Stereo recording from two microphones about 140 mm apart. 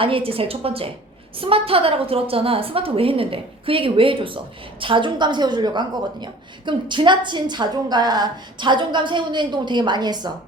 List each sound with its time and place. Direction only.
0.0 s a woman's voice: 40° right (ahead or behind)